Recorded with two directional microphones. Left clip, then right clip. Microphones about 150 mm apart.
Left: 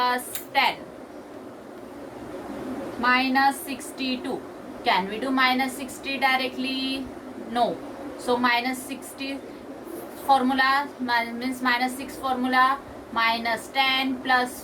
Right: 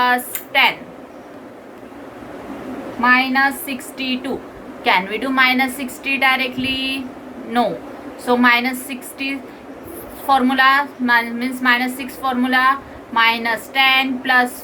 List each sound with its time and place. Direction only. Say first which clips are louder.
0.0 s a sound: right 8 dB; 45° right (ahead or behind)
3.0 s a woman's voice: right 6 dB; 45° right (ahead or behind)
10.2 s a woman's voice: right 7 dB; 40° right (ahead or behind)